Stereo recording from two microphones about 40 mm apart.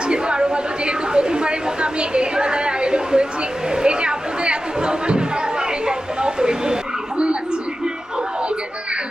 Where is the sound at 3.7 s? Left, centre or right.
Right.